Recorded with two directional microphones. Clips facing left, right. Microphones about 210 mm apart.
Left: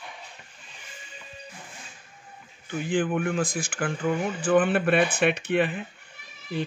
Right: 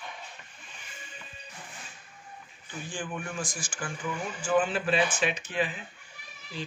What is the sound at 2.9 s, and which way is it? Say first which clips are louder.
Speech: left 12 dB; 60° left (ahead or behind).